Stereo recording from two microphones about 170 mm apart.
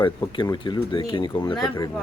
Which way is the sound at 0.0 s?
25° left (ahead or behind).